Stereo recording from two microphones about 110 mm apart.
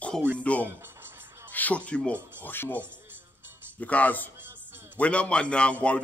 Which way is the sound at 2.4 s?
20° left (ahead or behind).